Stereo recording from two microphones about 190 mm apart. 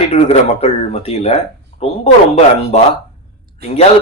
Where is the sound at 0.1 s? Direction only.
35° left (ahead or behind).